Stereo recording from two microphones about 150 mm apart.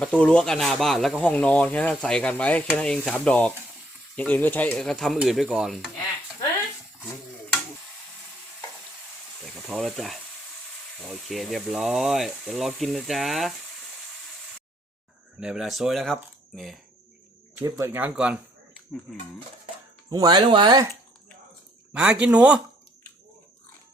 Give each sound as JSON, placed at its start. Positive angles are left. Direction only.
{"t": 0.0, "sound": "speech", "side_deg": 10}
{"t": 9.4, "sound": "speech", "side_deg": 0}
{"t": 15.4, "sound": "speech", "side_deg": -5}
{"t": 17.7, "sound": "speech", "side_deg": -20}
{"t": 20.1, "sound": "speech", "side_deg": -25}
{"t": 21.9, "sound": "speech", "side_deg": -5}